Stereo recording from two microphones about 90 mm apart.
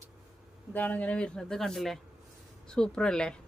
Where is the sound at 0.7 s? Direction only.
20° left (ahead or behind).